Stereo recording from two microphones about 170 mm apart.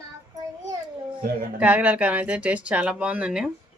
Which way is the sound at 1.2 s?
65° right (ahead or behind).